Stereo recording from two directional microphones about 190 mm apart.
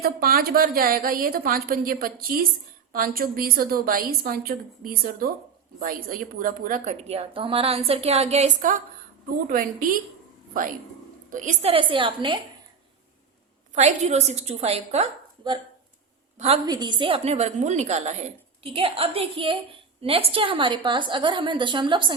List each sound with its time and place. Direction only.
0.0 s a woman's voice: 50° right (ahead or behind); by 12.4 s 25° right (ahead or behind)
13.7 s a woman's voice: 35° right (ahead or behind)
16.6 s a woman's voice: 20° right (ahead or behind)